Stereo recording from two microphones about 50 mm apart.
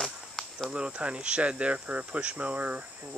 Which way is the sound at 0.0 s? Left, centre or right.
Centre.